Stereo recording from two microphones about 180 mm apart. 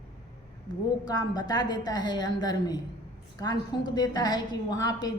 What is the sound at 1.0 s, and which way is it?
A woman's voice, 25° left (ahead or behind).